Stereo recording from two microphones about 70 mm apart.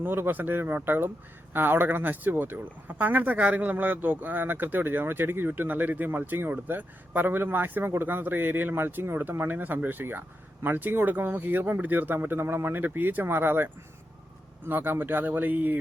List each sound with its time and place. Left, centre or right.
0.0 s speech: right